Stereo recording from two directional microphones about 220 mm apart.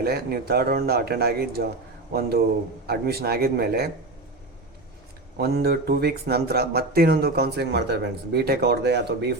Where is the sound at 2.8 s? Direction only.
45° right (ahead or behind).